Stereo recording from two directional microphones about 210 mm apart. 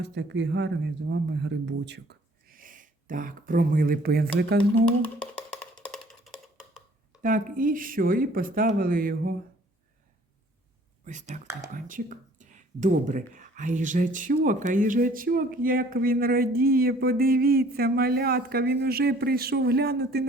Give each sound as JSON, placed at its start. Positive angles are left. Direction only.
{"t": 0.0, "sound": "speech", "side_deg": -55}
{"t": 5.0, "sound": "a sound", "side_deg": 5}
{"t": 5.8, "sound": "music", "side_deg": 5}
{"t": 7.2, "sound": "speech", "side_deg": -40}
{"t": 11.0, "sound": "speech", "side_deg": -35}